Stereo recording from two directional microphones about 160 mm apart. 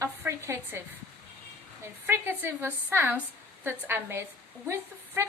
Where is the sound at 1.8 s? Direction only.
15° right (ahead or behind).